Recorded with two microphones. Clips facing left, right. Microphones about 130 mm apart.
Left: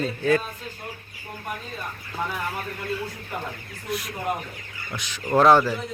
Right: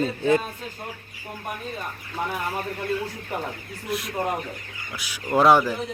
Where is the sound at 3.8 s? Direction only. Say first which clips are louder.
Right 1 dB; centre (ahead or behind).